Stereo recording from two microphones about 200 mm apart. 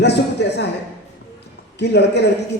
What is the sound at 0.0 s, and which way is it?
Speech, 55° left (ahead or behind).